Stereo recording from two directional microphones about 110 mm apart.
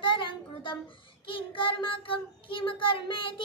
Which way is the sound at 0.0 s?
50° left (ahead or behind).